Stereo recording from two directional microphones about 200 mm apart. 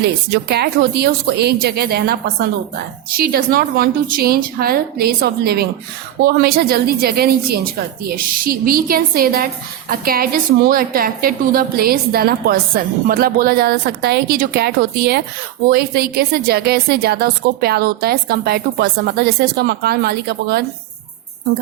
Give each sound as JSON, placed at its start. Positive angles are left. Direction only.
{"t": 0.3, "sound": "a woman's voice", "side_deg": -55}